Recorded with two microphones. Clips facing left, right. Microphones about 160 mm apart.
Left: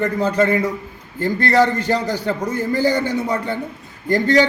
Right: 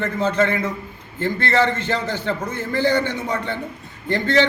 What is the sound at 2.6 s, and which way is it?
Speech, 10° left (ahead or behind).